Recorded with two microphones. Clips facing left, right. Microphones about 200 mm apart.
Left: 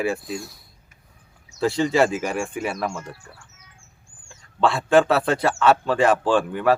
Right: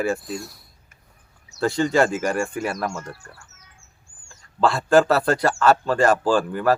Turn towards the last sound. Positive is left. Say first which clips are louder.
# even
turn(degrees=0)  # may be behind; listen again after turning